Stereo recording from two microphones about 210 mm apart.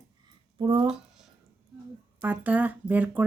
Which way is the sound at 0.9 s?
Centre (ahead or behind).